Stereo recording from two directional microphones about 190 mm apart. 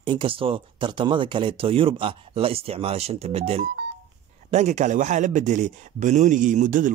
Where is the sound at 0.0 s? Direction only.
25° right (ahead or behind).